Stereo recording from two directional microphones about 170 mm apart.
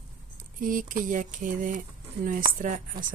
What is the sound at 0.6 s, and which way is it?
A woman's voice, 55° right (ahead or behind).